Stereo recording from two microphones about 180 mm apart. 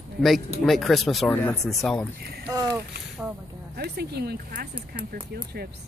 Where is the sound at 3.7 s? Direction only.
65° right (ahead or behind).